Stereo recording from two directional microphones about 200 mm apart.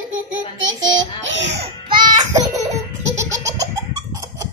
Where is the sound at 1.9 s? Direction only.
20° right (ahead or behind).